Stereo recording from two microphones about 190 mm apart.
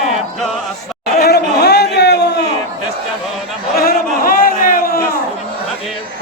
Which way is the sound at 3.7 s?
50° left (ahead or behind).